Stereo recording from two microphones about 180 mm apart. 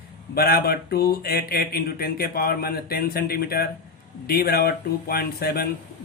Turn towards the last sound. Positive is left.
turn(degrees=60)  # may be behind; listen again after turning